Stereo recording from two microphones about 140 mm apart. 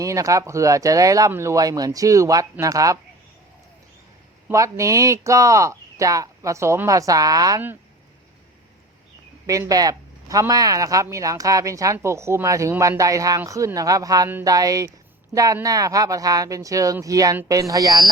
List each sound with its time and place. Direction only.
0.0 s speech: 20° right (ahead or behind)
4.4 s speech: 20° right (ahead or behind)
9.5 s speech: 25° right (ahead or behind)